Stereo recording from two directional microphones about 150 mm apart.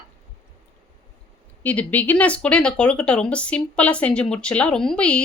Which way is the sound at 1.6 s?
10° left (ahead or behind).